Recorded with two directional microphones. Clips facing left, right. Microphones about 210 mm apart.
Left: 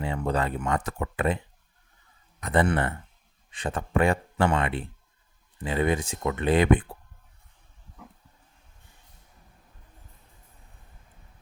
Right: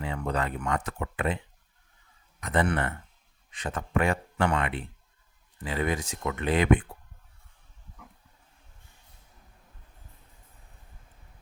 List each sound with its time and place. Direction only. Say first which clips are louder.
0.0 s speech: left 3 dB; 30° left (ahead or behind)
2.4 s speech: left 3 dB; 35° left (ahead or behind)